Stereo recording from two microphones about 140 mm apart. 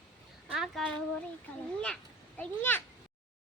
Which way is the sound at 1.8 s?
10° left (ahead or behind).